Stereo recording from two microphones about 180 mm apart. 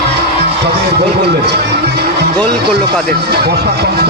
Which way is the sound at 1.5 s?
65° right (ahead or behind).